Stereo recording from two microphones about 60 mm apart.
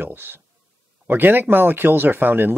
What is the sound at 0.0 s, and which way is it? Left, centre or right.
Speech, right.